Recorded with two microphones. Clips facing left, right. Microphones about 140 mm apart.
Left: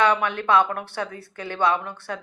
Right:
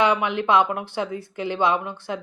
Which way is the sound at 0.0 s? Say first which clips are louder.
Right 1 dB; 15° right (ahead or behind).